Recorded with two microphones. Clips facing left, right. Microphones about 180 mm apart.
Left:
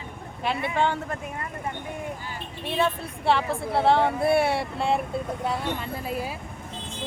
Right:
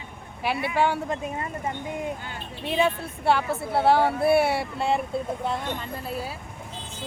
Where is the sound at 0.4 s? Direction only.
5° right (ahead or behind).